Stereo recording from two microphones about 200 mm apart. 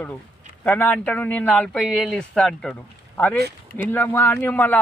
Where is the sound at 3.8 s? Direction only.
10° left (ahead or behind).